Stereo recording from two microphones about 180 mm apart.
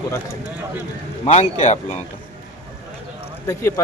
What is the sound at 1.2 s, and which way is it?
Speech, 35° left (ahead or behind).